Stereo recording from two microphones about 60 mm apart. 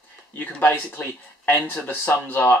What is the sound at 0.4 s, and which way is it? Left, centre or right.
Speech, left.